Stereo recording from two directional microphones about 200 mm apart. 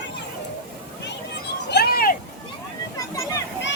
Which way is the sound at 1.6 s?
55° left (ahead or behind).